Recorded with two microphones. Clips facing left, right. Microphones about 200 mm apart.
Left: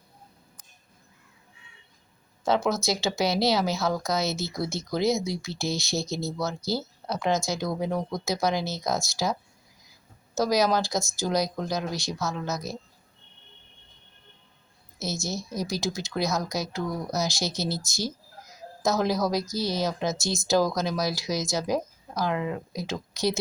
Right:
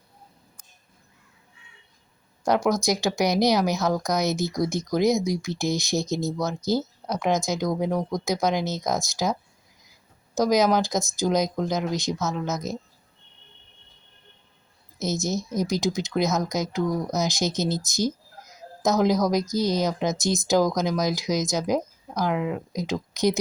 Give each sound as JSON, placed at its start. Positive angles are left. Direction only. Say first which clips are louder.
{"t": 2.4, "sound": "speech", "louder": "right 3 dB", "side_deg": -15}
{"t": 10.3, "sound": "speech", "louder": "right 3 dB", "side_deg": -20}
{"t": 14.9, "sound": "speech", "louder": "right 5 dB", "side_deg": -20}